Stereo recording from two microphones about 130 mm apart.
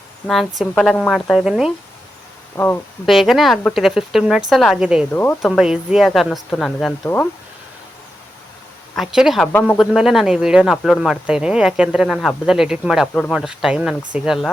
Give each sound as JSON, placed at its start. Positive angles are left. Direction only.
{"t": 0.3, "sound": "speech", "side_deg": 0}
{"t": 3.1, "sound": "speech", "side_deg": 0}
{"t": 5.1, "sound": "speech", "side_deg": 15}
{"t": 5.5, "sound": "speech", "side_deg": -5}
{"t": 9.0, "sound": "speech", "side_deg": 0}
{"t": 9.5, "sound": "speech", "side_deg": 15}
{"t": 9.7, "sound": "speech", "side_deg": -5}